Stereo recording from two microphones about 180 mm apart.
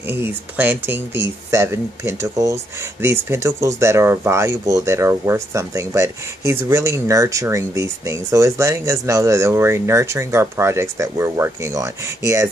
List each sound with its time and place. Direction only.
0.1 s speech: 10° right (ahead or behind)